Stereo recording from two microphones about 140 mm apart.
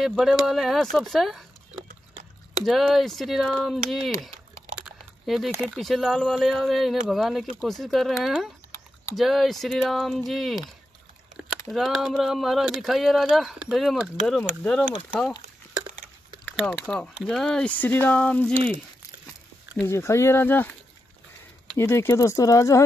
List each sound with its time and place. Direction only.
0.0 s speech: centre (ahead or behind)
4.8 s a sound: centre (ahead or behind)
5.8 s speech: centre (ahead or behind)
11.7 s speech: centre (ahead or behind)
16.4 s speech: 5° left (ahead or behind)
19.8 s speech: 20° left (ahead or behind)
21.7 s speech: 20° left (ahead or behind)